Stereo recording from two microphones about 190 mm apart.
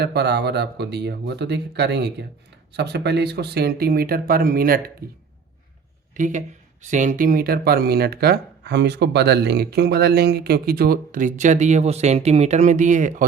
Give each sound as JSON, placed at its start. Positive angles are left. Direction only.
{"t": 0.0, "sound": "speech", "side_deg": -60}